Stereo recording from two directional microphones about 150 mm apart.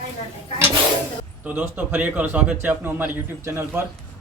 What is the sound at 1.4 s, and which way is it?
A man's voice, 10° right (ahead or behind).